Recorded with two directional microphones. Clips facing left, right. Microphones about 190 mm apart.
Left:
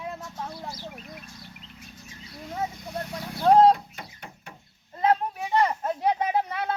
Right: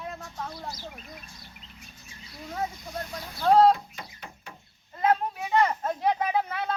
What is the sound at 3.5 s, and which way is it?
Speech, 45° left (ahead or behind).